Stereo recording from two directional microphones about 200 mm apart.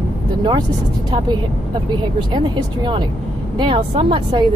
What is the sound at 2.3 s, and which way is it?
Speech, 25° right (ahead or behind).